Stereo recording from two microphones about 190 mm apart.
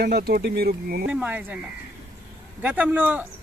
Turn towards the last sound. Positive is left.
turn(degrees=-10)  # may be behind; listen again after turning